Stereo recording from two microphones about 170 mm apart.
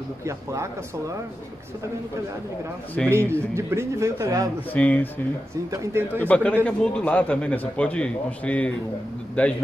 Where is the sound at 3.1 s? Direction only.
15° right (ahead or behind).